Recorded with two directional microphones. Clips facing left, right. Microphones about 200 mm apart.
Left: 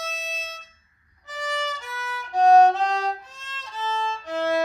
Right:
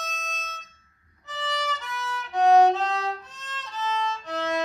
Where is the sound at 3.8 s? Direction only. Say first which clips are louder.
Even; 25° left (ahead or behind).